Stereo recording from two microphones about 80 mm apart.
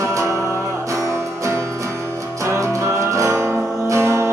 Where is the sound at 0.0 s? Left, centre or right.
Right.